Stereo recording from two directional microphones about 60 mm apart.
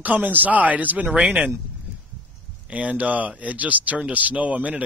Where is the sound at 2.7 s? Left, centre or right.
Right.